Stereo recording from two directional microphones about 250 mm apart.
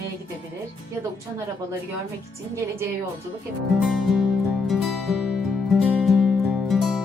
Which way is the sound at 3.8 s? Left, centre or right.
Centre.